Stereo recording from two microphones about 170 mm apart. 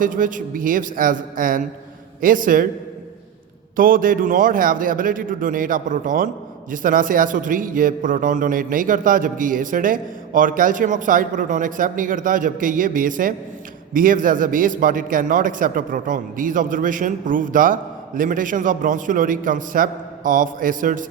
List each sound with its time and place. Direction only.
0.0 s a man's voice: 50° right (ahead or behind)
3.8 s a man's voice: 55° right (ahead or behind)